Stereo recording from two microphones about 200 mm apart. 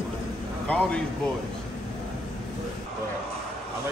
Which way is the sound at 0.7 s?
5° left (ahead or behind).